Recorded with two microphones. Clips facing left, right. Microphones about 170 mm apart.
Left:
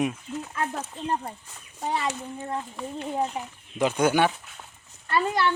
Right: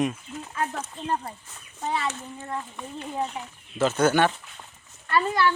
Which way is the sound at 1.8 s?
10° left (ahead or behind).